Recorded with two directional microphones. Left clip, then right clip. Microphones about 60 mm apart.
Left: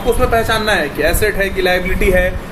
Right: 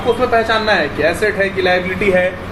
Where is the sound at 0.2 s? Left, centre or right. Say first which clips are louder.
Right 1 dB; left.